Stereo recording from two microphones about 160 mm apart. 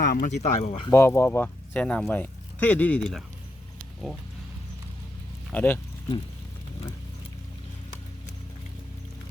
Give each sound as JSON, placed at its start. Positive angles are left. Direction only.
{"t": 0.0, "sound": "speech", "side_deg": 80}
{"t": 0.6, "sound": "speech", "side_deg": 40}
{"t": 0.9, "sound": "speech", "side_deg": 15}
{"t": 5.5, "sound": "speech", "side_deg": 10}